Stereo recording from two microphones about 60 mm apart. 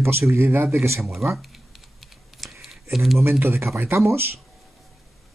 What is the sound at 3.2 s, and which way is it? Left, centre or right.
Speech, right.